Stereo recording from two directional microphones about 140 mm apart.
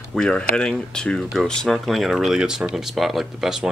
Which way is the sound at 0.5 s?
5° left (ahead or behind).